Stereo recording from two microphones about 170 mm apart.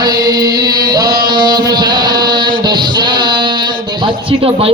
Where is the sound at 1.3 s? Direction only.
25° right (ahead or behind).